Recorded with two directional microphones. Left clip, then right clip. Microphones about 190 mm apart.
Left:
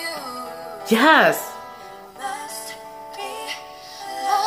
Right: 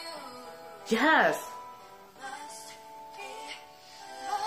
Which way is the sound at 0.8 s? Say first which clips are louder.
Left 9 dB; 20° left (ahead or behind).